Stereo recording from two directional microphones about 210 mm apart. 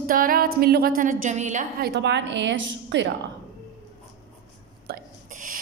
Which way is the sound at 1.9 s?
55° right (ahead or behind).